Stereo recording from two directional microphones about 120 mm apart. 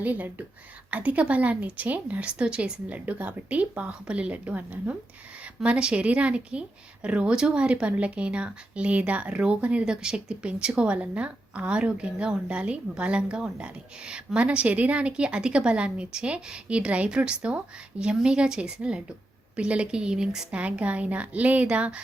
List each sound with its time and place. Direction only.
0.0 s a woman's voice: 15° right (ahead or behind)